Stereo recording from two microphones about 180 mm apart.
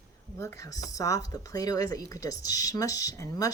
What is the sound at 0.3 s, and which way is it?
A woman's voice, 15° left (ahead or behind).